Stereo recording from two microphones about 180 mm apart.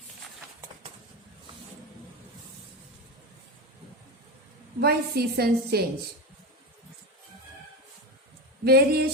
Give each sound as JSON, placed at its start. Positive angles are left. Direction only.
{"t": 4.8, "sound": "a woman's voice", "side_deg": -60}
{"t": 8.6, "sound": "a woman's voice", "side_deg": -60}